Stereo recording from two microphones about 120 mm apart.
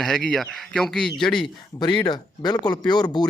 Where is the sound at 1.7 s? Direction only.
35° left (ahead or behind).